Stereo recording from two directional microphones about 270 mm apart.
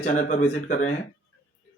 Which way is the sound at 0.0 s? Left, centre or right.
Left.